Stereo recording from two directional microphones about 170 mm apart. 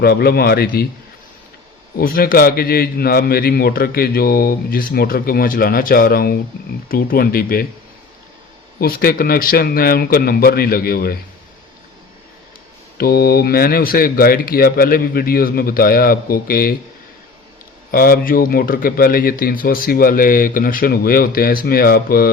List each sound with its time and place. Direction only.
0.0 s a man's voice: 65° left (ahead or behind)
2.0 s a man's voice: 60° left (ahead or behind)
8.8 s a man's voice: 60° left (ahead or behind)
13.0 s a man's voice: 65° left (ahead or behind)
17.9 s a man's voice: 60° left (ahead or behind)